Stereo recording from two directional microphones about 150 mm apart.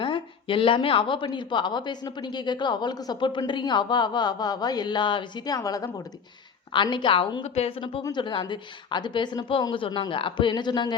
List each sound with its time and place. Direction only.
0.0 s a woman's voice: 35° left (ahead or behind)